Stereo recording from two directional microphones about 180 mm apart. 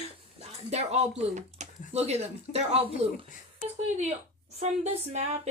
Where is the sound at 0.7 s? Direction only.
35° right (ahead or behind).